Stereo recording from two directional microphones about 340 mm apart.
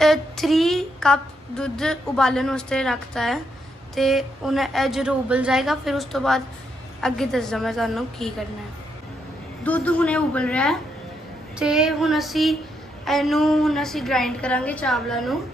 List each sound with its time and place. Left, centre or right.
0.0 s a sound: centre
3.9 s a woman's voice: centre
9.6 s a woman's voice: centre